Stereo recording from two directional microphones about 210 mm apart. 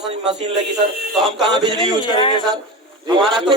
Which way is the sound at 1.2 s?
25° right (ahead or behind).